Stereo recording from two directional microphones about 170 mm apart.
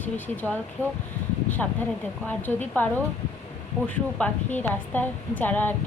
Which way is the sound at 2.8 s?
10° left (ahead or behind).